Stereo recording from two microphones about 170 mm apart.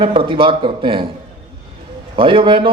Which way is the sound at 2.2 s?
30° right (ahead or behind).